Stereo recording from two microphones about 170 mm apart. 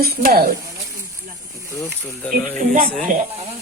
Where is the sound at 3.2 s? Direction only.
35° right (ahead or behind).